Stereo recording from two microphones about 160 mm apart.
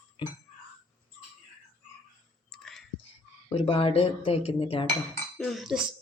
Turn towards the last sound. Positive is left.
turn(degrees=0)  # may be behind; listen again after turning